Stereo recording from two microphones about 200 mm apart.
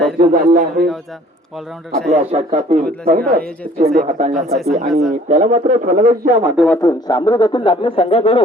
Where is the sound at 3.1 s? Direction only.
50° right (ahead or behind).